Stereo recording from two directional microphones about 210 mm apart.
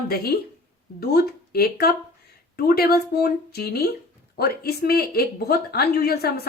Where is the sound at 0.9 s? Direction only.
50° left (ahead or behind).